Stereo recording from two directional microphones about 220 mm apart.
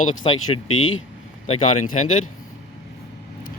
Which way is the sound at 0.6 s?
65° left (ahead or behind).